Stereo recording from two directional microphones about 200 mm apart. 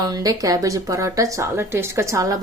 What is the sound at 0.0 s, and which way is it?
Speech, 20° right (ahead or behind).